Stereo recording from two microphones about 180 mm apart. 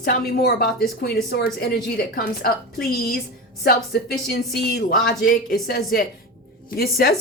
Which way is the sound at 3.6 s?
55° left (ahead or behind).